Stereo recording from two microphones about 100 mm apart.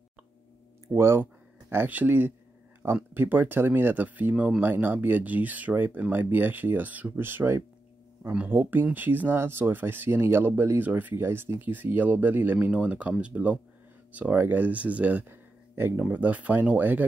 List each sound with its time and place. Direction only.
0.9 s speech: 25° right (ahead or behind)